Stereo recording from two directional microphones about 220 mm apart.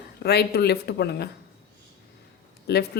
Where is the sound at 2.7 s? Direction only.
50° left (ahead or behind).